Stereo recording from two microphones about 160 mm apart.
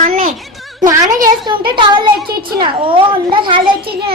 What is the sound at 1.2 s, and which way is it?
A child's voice, 30° right (ahead or behind).